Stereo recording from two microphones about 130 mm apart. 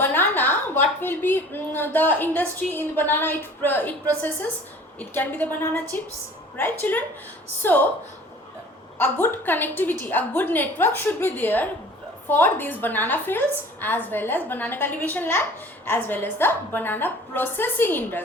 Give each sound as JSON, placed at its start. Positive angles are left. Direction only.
{"t": 0.0, "sound": "a woman's voice", "side_deg": 15}
{"t": 9.0, "sound": "a woman's voice", "side_deg": 15}